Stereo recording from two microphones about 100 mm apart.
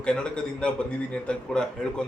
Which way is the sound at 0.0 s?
10° left (ahead or behind).